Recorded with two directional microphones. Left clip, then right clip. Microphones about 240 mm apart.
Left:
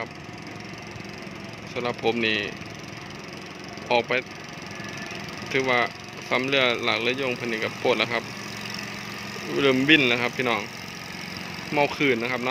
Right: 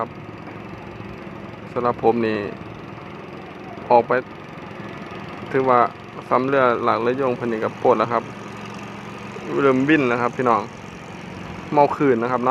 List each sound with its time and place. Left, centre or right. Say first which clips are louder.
1.7 s speech: right 7 dB; centre
5.5 s speech: right 6 dB; left
9.5 s speech: right 2 dB; left
11.7 s speech: right 6 dB; centre